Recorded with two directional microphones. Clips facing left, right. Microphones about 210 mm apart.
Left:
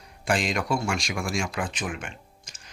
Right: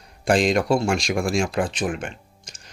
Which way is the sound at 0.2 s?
35° right (ahead or behind).